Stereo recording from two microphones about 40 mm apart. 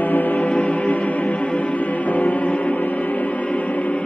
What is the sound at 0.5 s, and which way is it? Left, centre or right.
Music, left.